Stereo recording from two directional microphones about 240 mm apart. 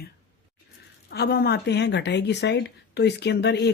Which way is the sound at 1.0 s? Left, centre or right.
Left.